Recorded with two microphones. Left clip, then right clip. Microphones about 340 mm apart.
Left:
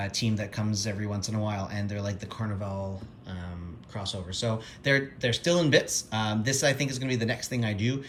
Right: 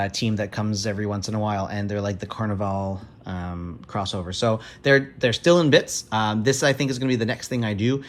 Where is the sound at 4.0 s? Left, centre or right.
Centre.